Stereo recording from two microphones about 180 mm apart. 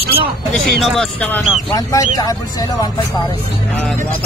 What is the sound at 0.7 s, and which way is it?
Speech, centre (ahead or behind).